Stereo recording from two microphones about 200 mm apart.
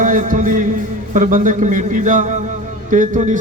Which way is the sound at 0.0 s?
40° right (ahead or behind).